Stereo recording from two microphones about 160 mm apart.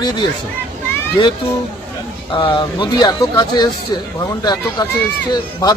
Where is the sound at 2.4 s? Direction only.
30° left (ahead or behind).